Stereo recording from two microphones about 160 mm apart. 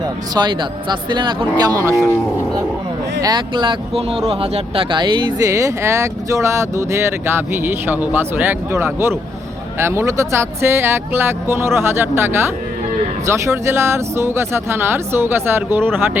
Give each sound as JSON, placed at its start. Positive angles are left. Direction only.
{"t": 0.3, "sound": "speech", "side_deg": -30}
{"t": 3.2, "sound": "speech", "side_deg": -25}